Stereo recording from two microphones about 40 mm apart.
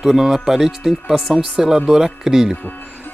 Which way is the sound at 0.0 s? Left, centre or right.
Centre.